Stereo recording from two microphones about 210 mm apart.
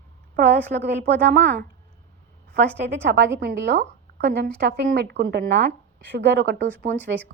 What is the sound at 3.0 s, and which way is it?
A woman's voice, 55° right (ahead or behind).